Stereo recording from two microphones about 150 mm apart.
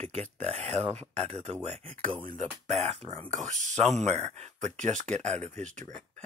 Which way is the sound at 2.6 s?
45° right (ahead or behind).